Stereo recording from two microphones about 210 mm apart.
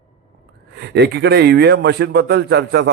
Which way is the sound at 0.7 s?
55° right (ahead or behind).